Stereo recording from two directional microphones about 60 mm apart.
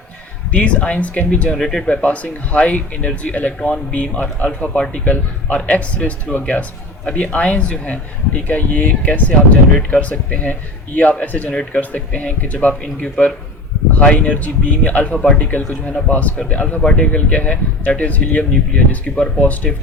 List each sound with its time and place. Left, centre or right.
0.5 s speech: left
1.5 s speech: centre
1.9 s speech: left